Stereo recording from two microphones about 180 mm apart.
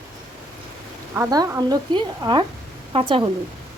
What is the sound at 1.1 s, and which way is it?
A woman's voice, 20° right (ahead or behind).